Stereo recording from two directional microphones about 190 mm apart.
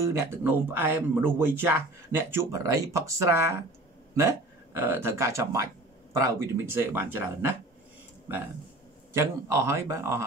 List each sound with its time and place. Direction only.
0.0 s speech: 15° right (ahead or behind)
9.1 s speech: 15° right (ahead or behind)